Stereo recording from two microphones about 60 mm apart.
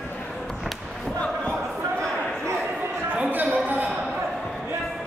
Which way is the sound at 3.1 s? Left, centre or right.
Right.